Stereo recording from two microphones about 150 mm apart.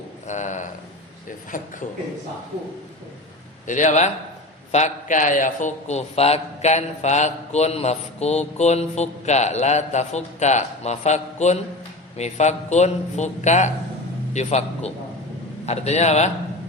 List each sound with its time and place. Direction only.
0.3 s speech: 50° left (ahead or behind)
1.5 s a man's voice: 65° left (ahead or behind)
3.7 s a man's voice: 55° left (ahead or behind)